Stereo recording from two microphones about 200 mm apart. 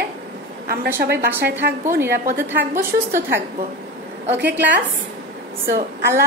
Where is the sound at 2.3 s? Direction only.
10° right (ahead or behind).